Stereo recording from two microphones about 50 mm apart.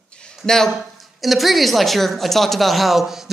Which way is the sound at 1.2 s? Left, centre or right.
Centre.